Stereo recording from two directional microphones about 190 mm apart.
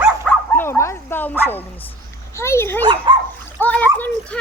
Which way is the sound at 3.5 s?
10° left (ahead or behind).